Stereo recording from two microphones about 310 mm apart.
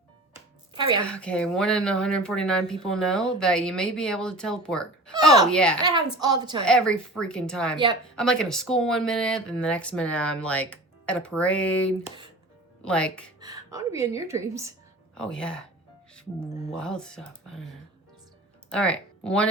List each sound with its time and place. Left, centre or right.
0.3 s music: centre
1.0 s speech: centre
5.8 s a woman's voice: centre
6.7 s speech: centre
13.4 s a woman's voice: centre
15.1 s speech: centre
16.7 s speech: centre
18.7 s speech: centre